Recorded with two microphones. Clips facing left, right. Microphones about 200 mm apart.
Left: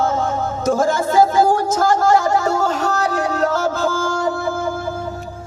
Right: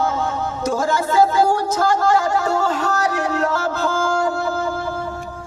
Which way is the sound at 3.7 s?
45° left (ahead or behind).